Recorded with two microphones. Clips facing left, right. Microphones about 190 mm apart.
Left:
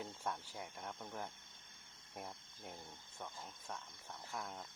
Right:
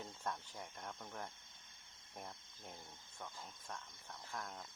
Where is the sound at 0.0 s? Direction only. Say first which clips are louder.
Left 1 dB; 10° left (ahead or behind).